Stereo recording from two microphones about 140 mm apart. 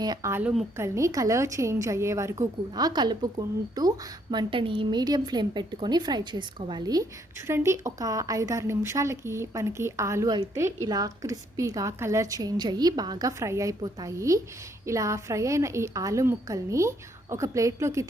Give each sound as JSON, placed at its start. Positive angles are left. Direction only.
{"t": 0.0, "sound": "a woman's voice", "side_deg": -25}